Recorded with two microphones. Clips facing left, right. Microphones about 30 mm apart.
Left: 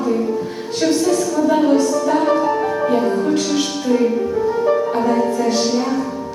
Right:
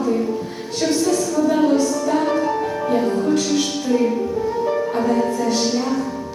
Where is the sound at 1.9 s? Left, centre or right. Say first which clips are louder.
Left 3 dB; centre.